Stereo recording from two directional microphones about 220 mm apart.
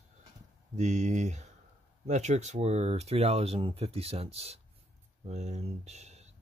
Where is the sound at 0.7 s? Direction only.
30° right (ahead or behind).